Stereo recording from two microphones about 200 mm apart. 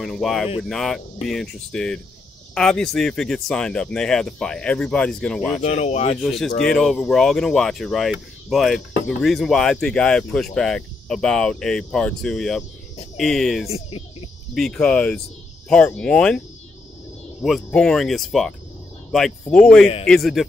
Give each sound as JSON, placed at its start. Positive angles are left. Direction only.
{"t": 0.0, "sound": "speech", "side_deg": 0}
{"t": 5.6, "sound": "speech", "side_deg": 35}
{"t": 6.6, "sound": "speech", "side_deg": 5}
{"t": 13.7, "sound": "a sound", "side_deg": 30}
{"t": 14.5, "sound": "speech", "side_deg": 0}
{"t": 17.4, "sound": "speech", "side_deg": 0}